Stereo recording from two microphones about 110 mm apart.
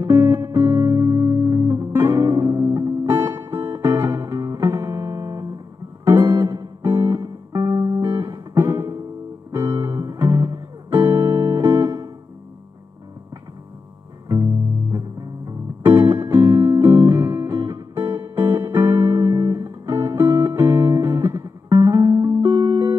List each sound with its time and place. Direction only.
0.0 s music: 20° right (ahead or behind)
7.5 s music: 35° right (ahead or behind)
14.3 s music: 30° right (ahead or behind)
22.4 s music: 20° right (ahead or behind)